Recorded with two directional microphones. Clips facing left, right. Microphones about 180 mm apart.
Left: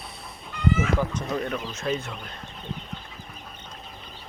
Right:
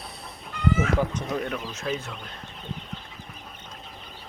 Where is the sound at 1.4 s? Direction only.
5° right (ahead or behind).